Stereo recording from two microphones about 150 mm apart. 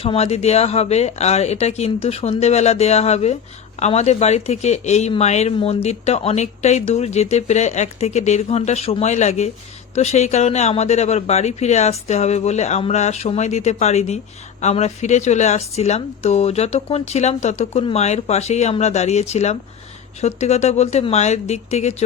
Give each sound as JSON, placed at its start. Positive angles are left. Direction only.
{"t": 0.0, "sound": "speech", "side_deg": 40}